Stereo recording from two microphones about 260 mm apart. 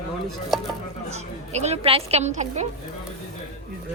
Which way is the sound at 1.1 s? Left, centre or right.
Right.